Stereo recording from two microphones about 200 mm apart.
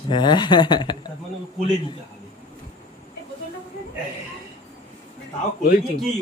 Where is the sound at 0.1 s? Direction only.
20° left (ahead or behind).